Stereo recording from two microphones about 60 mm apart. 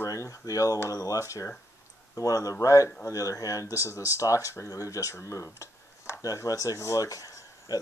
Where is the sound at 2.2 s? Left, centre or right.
Left.